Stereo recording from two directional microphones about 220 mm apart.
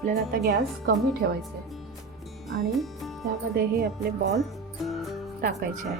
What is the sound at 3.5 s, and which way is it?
Music, 45° right (ahead or behind).